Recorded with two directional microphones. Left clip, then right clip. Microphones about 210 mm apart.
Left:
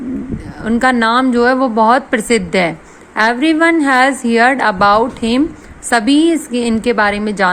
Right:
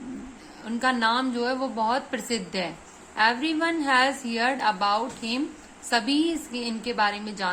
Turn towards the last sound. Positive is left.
turn(degrees=35)  # may be behind; listen again after turning